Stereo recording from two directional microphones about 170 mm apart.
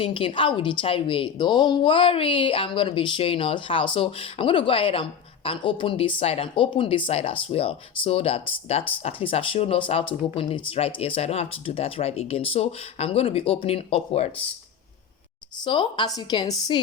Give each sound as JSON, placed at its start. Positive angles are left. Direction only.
{"t": 0.0, "sound": "speech", "side_deg": 30}
{"t": 15.6, "sound": "a woman's voice", "side_deg": 30}